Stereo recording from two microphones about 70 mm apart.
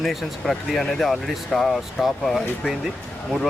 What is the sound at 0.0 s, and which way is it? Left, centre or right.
Speech, centre.